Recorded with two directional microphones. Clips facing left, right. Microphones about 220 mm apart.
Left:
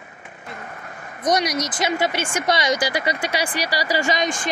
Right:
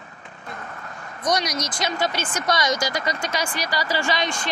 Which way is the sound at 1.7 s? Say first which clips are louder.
Left 2 dB; 10° left (ahead or behind).